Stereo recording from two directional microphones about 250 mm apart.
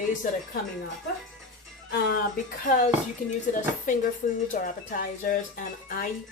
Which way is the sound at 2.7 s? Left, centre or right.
Left.